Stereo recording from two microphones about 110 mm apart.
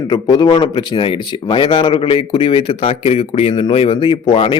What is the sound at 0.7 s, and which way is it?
Speech, 50° left (ahead or behind).